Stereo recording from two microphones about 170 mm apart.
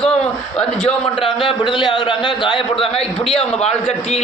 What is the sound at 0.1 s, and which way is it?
A man's voice, 5° left (ahead or behind).